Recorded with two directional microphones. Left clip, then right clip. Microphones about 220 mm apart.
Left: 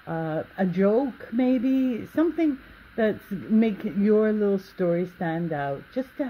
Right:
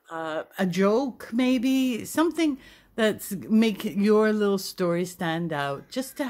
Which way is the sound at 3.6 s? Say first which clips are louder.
Right 1 dB; 35° right (ahead or behind).